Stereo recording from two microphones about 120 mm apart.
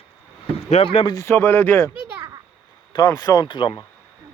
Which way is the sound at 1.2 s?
20° left (ahead or behind).